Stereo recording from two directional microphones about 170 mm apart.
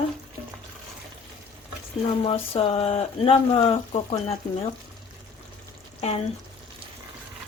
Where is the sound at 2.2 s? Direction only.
35° left (ahead or behind).